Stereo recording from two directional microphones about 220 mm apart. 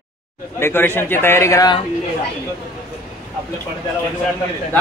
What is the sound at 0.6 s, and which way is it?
A man's voice, 10° left (ahead or behind).